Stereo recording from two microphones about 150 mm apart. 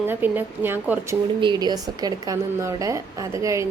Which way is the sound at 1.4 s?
30° right (ahead or behind).